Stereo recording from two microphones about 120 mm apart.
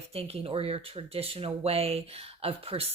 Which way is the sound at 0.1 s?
55° right (ahead or behind).